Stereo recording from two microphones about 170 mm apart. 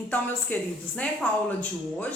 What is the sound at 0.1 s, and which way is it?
Speech, 10° left (ahead or behind).